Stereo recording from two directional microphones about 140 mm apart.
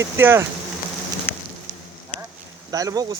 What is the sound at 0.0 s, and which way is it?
Speech, 15° right (ahead or behind).